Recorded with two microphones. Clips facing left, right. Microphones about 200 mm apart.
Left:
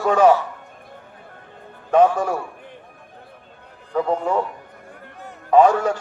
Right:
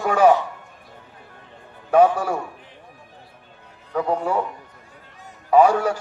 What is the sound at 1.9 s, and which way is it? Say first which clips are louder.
Speech: even; 10° right (ahead or behind).